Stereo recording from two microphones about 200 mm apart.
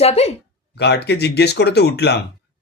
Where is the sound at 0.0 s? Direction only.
30° left (ahead or behind).